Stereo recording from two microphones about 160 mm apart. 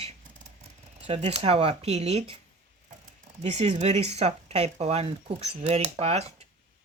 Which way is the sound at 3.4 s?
45° right (ahead or behind).